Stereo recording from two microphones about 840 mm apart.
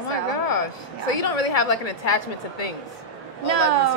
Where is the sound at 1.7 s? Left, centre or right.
Left.